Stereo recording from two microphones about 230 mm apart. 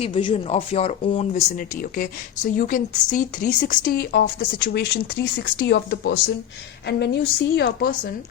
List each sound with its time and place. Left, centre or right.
0.0 s a woman's voice: left